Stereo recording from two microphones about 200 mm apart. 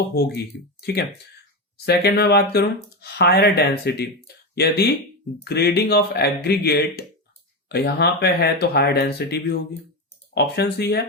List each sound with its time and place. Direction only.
0.1 s speech: 55° left (ahead or behind)